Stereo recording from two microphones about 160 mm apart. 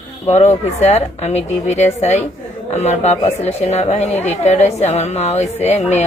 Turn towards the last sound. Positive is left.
turn(degrees=45)  # may be behind; listen again after turning